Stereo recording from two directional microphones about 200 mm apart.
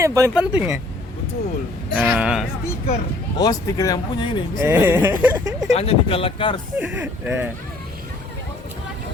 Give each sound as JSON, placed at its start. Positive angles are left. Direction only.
{"t": 0.0, "sound": "speech", "side_deg": -15}
{"t": 2.0, "sound": "speech", "side_deg": -5}
{"t": 3.3, "sound": "speech", "side_deg": 20}
{"t": 4.6, "sound": "speech", "side_deg": -10}
{"t": 5.7, "sound": "speech", "side_deg": 30}
{"t": 6.7, "sound": "speech", "side_deg": -10}